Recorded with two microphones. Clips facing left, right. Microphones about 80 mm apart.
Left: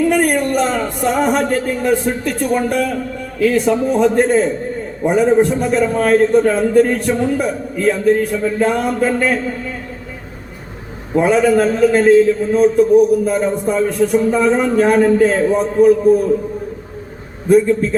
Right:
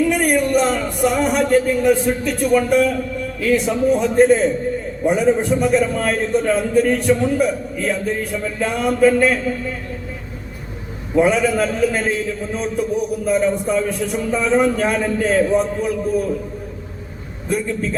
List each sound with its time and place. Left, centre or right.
0.1 s a man's voice: left
11.1 s a man's voice: left
17.5 s a man's voice: left